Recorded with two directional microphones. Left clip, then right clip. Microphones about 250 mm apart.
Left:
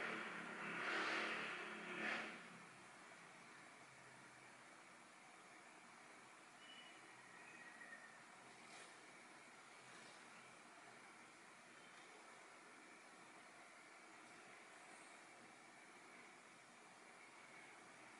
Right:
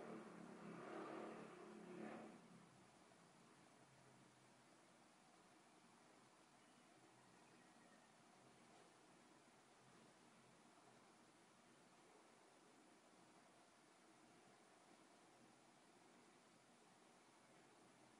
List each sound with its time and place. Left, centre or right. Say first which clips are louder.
0.0 s vehicle: left 10 dB; centre